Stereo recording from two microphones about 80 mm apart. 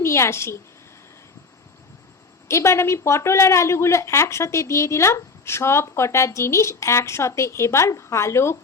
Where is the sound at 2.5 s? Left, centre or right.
Left.